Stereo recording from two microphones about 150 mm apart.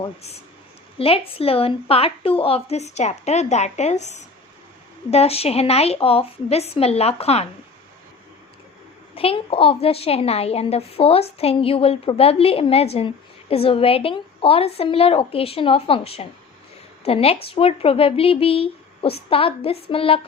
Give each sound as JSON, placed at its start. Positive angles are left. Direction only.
{"t": 0.9, "sound": "a woman's voice", "side_deg": 40}
{"t": 9.1, "sound": "a woman's voice", "side_deg": 40}